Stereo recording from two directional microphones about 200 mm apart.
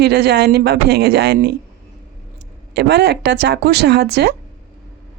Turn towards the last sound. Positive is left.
turn(degrees=-55)  # may be behind; listen again after turning